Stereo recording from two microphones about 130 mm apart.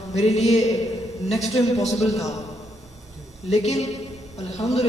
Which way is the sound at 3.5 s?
55° left (ahead or behind).